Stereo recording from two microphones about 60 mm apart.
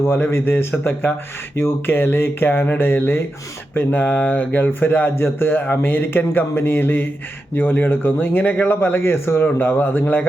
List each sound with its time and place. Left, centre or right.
0.0 s speech: left
3.8 s speech: left